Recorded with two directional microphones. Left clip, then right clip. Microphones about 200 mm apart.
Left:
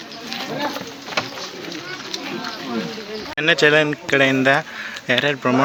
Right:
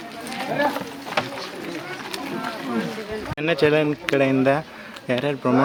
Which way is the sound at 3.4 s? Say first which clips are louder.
Left 5 dB; centre (ahead or behind).